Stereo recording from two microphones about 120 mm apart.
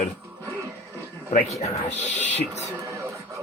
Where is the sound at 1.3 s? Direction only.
65° left (ahead or behind).